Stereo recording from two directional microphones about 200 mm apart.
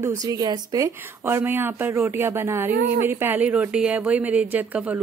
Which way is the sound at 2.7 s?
50° right (ahead or behind).